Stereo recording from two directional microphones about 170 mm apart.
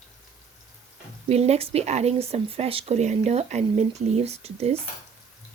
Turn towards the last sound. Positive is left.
turn(degrees=-35)  # may be behind; listen again after turning